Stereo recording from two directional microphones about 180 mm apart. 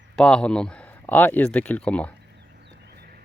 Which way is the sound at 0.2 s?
5° left (ahead or behind).